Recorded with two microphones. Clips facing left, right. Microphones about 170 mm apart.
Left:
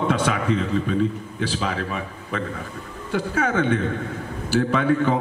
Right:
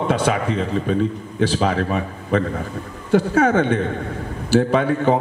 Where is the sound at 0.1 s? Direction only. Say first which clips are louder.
Right 2 dB; 30° right (ahead or behind).